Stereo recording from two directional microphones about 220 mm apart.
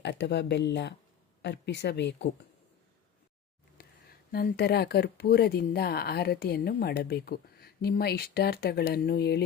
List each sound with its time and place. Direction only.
0.0 s speech: 50° left (ahead or behind)
4.3 s speech: 45° left (ahead or behind)